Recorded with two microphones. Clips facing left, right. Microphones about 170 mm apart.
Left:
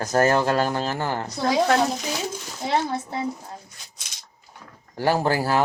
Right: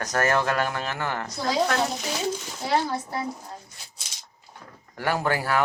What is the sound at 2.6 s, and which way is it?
Speech, 20° left (ahead or behind).